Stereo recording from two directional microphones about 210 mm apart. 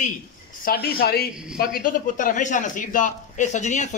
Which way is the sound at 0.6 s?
45° left (ahead or behind).